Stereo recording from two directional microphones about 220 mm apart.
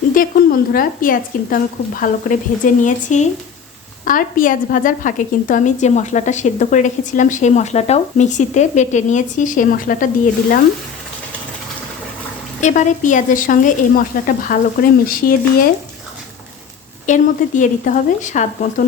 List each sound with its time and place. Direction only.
0.1 s a woman's voice: 40° left (ahead or behind)
12.6 s a woman's voice: 35° left (ahead or behind)
17.1 s a woman's voice: 35° left (ahead or behind)